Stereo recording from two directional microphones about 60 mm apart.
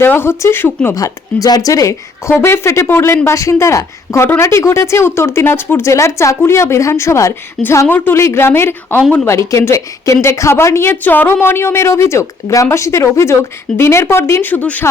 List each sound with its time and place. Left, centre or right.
0.0 s speech: left
0.9 s a woman's voice: left
2.4 s a woman's voice: left
3.2 s a woman's voice: left
5.9 s a woman's voice: left
7.9 s speech: left
8.1 s a woman's voice: left
9.2 s a woman's voice: left
10.9 s a woman's voice: left
14.4 s speech: left